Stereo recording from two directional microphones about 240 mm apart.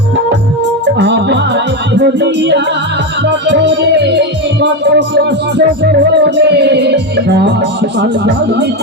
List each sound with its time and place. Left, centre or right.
0.9 s music: right
4.6 s music: right